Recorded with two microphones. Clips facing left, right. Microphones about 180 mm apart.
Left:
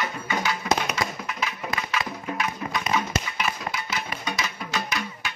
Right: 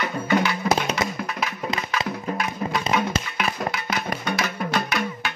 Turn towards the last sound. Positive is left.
turn(degrees=-60)  # may be behind; listen again after turning